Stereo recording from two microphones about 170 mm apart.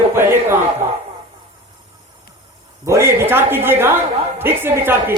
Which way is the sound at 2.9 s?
15° right (ahead or behind).